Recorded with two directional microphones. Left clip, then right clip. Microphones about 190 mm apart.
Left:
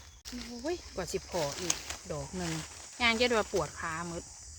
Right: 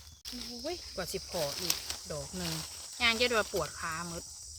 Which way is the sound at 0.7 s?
50° left (ahead or behind).